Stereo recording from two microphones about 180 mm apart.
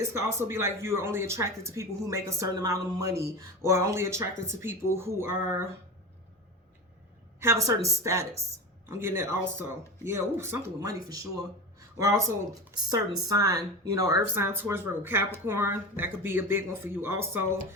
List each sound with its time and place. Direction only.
0.0 s speech: 15° right (ahead or behind)
7.3 s speech: 15° right (ahead or behind)